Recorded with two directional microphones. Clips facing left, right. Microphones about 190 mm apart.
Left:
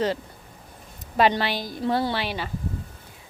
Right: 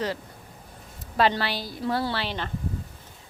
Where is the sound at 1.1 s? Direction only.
15° left (ahead or behind).